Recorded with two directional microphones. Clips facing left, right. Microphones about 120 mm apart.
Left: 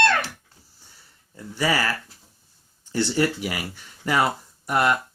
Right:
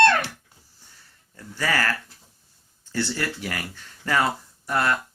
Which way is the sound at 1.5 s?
10° left (ahead or behind).